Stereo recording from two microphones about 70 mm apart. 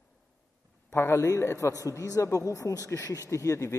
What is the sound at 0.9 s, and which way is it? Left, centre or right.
A man's voice, left.